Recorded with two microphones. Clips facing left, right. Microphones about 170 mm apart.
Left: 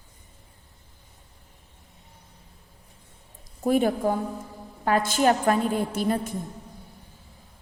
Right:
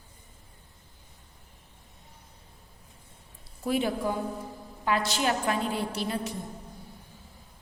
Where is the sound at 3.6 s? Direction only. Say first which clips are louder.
Left 6 dB; 50° left (ahead or behind).